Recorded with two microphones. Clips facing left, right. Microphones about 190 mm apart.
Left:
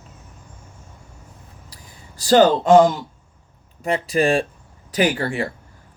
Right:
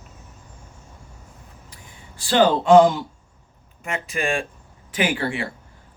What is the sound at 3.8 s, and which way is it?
Speech, 35° left (ahead or behind).